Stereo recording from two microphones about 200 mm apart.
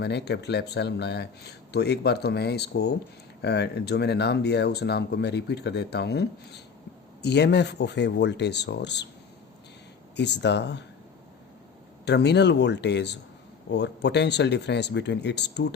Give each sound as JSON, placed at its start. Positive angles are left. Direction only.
{"t": 0.0, "sound": "speech", "side_deg": 55}
{"t": 10.2, "sound": "speech", "side_deg": 60}
{"t": 12.0, "sound": "speech", "side_deg": 55}